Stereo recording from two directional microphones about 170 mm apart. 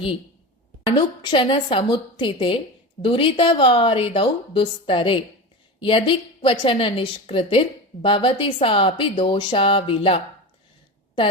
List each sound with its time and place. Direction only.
0.9 s a woman's voice: 25° left (ahead or behind)